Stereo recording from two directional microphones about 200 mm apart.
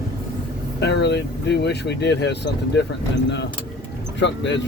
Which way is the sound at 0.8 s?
60° left (ahead or behind).